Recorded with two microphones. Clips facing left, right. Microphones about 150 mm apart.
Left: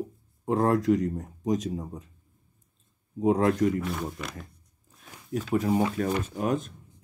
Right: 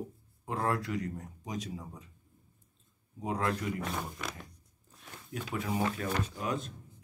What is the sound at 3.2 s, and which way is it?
Speech, 45° left (ahead or behind).